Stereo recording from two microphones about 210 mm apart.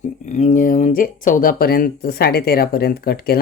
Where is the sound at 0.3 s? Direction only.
35° left (ahead or behind).